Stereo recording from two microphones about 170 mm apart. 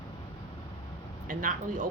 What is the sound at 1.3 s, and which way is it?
Speech, 50° right (ahead or behind).